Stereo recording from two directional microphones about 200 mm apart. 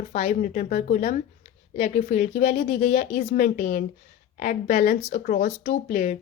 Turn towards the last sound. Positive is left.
turn(degrees=35)  # may be behind; listen again after turning